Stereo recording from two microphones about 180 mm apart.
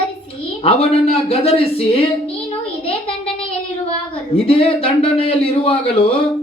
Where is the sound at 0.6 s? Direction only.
35° left (ahead or behind).